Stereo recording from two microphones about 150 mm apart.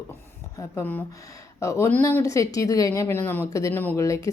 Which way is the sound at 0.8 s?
15° left (ahead or behind).